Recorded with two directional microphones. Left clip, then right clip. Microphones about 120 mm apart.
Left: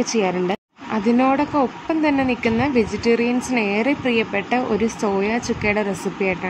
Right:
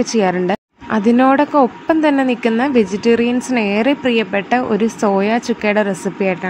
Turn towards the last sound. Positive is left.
turn(degrees=-45)  # may be behind; listen again after turning